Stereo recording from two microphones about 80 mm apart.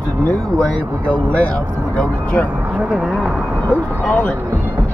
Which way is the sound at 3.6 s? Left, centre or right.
Centre.